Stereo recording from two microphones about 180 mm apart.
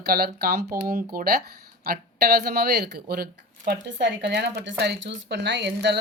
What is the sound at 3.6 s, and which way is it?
Speech, 75° right (ahead or behind).